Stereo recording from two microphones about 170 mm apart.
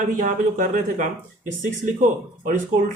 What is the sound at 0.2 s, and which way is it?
Speech, 50° right (ahead or behind).